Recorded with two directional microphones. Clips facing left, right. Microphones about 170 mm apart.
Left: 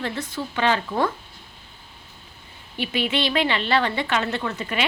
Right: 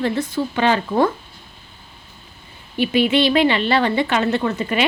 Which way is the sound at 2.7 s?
10° right (ahead or behind).